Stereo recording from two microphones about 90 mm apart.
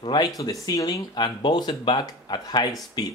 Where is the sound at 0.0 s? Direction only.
55° left (ahead or behind).